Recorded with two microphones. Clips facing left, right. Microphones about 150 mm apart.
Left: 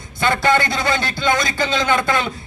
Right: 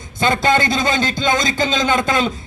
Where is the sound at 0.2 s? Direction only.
20° right (ahead or behind).